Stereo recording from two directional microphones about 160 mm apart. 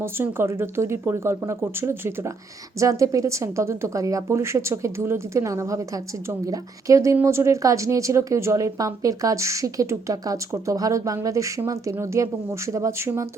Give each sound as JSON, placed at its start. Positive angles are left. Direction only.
{"t": 0.0, "sound": "a woman's voice", "side_deg": -15}